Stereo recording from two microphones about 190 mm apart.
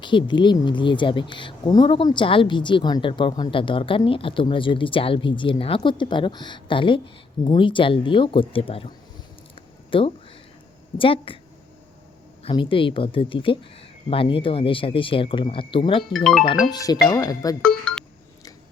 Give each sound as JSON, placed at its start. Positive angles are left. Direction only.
{"t": 0.0, "sound": "speech", "side_deg": 25}
{"t": 9.6, "sound": "a sound", "side_deg": 30}
{"t": 10.9, "sound": "speech", "side_deg": 25}
{"t": 12.4, "sound": "speech", "side_deg": 25}